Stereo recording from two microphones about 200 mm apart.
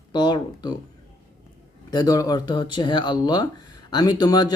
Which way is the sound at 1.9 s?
20° left (ahead or behind).